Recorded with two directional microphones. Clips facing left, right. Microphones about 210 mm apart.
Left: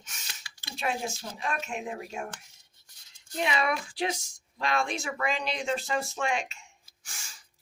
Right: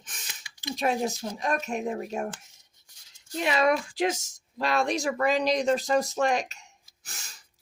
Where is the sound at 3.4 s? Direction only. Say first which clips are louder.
Right 6 dB; 45° right (ahead or behind).